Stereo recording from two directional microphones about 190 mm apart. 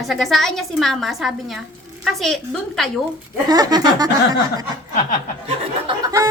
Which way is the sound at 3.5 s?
20° right (ahead or behind).